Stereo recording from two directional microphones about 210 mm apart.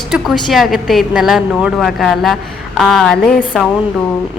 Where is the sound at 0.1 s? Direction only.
Centre (ahead or behind).